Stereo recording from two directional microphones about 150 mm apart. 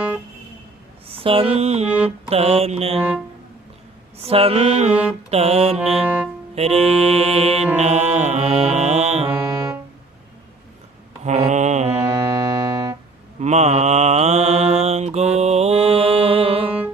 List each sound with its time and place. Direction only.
1.1 s music: 35° right (ahead or behind)
1.9 s mantra: 10° right (ahead or behind)
2.3 s mantra: 45° right (ahead or behind)
4.2 s music: 40° right (ahead or behind)
5.3 s mantra: 45° right (ahead or behind)
5.7 s music: 5° right (ahead or behind)
6.6 s music: 40° right (ahead or behind)
9.6 s music: 15° right (ahead or behind)
11.2 s mantra: 50° right (ahead or behind)
11.9 s music: 20° right (ahead or behind)
13.4 s mantra: 50° right (ahead or behind)